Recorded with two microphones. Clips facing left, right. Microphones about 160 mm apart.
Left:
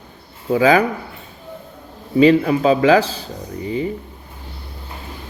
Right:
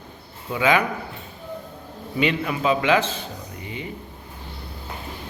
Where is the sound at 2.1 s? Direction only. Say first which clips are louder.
Left 11 dB; 35° left (ahead or behind).